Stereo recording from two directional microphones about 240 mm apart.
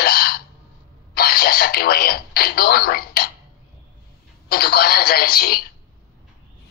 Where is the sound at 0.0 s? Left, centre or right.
Left.